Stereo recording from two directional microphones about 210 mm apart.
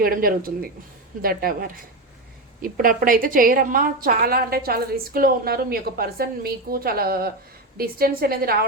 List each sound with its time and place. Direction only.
0.0 s a woman's voice: 45° right (ahead or behind)